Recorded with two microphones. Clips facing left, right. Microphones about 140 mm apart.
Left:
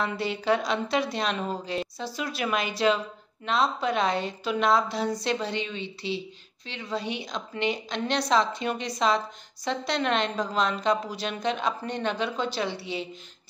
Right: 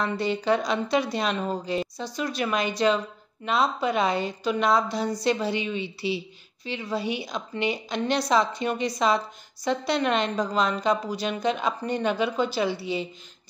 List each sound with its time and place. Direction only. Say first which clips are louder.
0.0 s a woman's voice: right 2 dB; 5° left (ahead or behind)